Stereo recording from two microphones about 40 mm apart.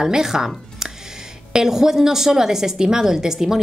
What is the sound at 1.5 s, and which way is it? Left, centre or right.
Speech, centre.